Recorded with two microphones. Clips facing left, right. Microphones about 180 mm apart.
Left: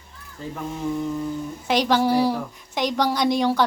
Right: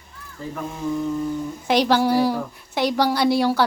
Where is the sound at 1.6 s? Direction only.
10° right (ahead or behind).